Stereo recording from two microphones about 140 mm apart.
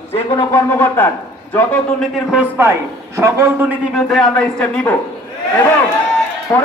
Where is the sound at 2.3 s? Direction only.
10° right (ahead or behind).